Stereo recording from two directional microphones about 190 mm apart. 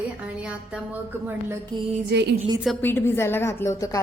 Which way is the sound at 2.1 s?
65° right (ahead or behind).